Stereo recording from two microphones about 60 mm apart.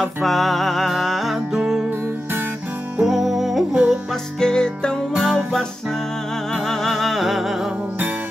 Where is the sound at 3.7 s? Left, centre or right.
Centre.